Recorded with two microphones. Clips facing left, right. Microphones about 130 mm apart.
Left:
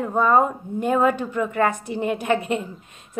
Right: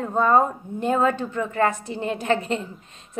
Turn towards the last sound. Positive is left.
turn(degrees=15)  # may be behind; listen again after turning